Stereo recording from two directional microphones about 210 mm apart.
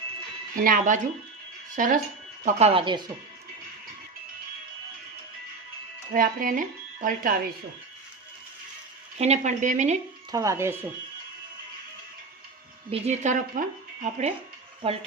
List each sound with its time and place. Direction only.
0.5 s speech: 40° right (ahead or behind); by 3.1 s 20° right (ahead or behind)
6.1 s speech: 40° right (ahead or behind)
9.1 s speech: 30° right (ahead or behind)
10.3 s speech: 15° right (ahead or behind)
12.9 s speech: 35° right (ahead or behind)